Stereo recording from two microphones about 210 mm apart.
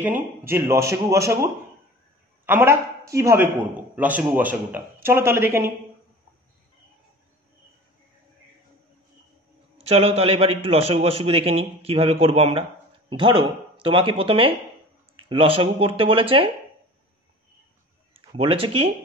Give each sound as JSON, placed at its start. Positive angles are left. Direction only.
{"t": 0.0, "sound": "a man's voice", "side_deg": -10}
{"t": 9.8, "sound": "a man's voice", "side_deg": -30}
{"t": 18.3, "sound": "a man's voice", "side_deg": -25}